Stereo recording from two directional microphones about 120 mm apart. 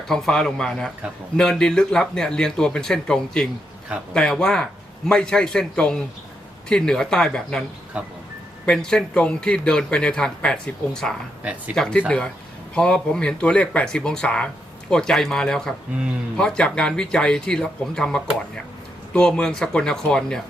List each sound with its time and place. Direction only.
0.1 s speech: 5° left (ahead or behind)
7.9 s speech: 10° right (ahead or behind)
8.6 s a man's voice: 5° left (ahead or behind)